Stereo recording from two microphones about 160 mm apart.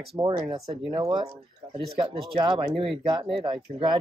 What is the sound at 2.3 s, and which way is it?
Speech, 30° right (ahead or behind).